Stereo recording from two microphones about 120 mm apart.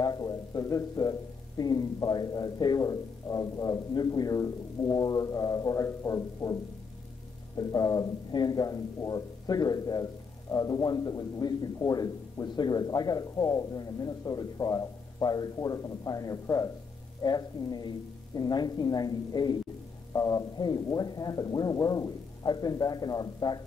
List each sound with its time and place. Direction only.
0.0 s a man's voice: 35° left (ahead or behind)